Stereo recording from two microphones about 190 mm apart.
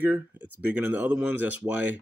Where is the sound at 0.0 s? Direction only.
10° right (ahead or behind).